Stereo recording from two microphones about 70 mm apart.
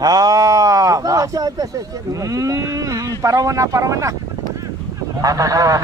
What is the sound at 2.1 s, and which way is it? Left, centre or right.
Cattle, right.